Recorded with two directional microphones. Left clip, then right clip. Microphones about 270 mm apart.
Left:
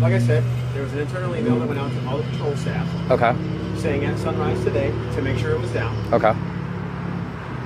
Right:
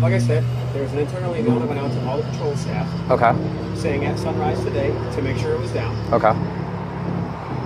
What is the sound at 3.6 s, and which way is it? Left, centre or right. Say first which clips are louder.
Speech: right 1 dB; centre.